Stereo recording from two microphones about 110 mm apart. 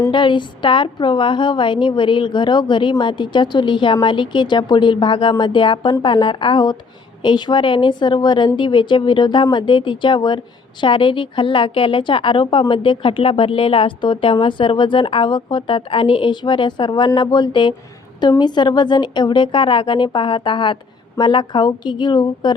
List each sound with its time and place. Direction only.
0.1 s a woman's voice: 45° left (ahead or behind)